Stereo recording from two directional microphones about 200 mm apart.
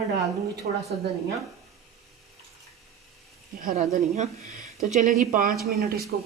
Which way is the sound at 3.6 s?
40° right (ahead or behind).